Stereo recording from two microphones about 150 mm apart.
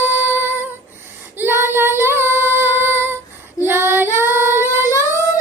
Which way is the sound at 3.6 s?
15° right (ahead or behind).